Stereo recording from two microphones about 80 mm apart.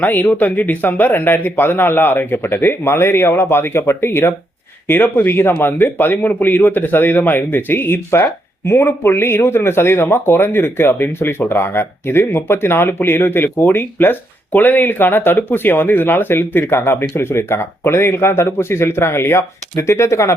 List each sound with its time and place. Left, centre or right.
0.0 s speech: left